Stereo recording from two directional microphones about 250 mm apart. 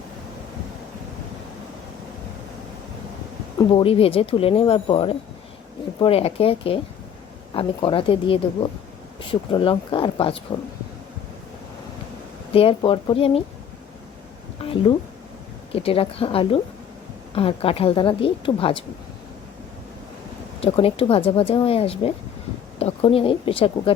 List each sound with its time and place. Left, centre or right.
3.6 s speech: centre
12.5 s speech: left
14.6 s speech: left
20.6 s speech: left